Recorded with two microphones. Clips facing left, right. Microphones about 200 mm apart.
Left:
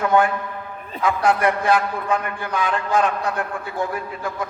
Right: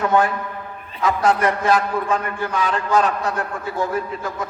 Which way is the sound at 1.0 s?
40° right (ahead or behind).